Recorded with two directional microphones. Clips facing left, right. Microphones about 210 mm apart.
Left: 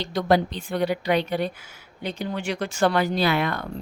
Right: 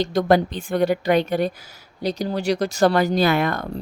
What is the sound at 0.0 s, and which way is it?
Speech, 45° right (ahead or behind).